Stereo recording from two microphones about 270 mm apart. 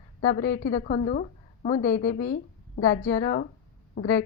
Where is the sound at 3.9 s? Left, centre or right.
Left.